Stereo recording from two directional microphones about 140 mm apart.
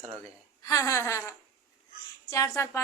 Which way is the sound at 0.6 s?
25° left (ahead or behind).